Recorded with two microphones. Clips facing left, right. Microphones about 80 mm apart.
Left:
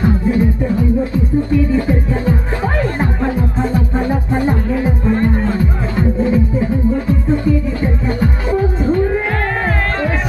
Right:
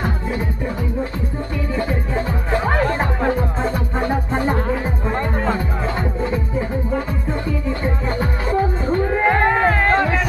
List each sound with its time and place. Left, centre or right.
7.8 s music: centre
9.2 s music: centre